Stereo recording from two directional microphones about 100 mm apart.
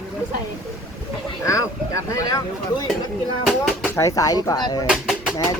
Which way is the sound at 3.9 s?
30° left (ahead or behind).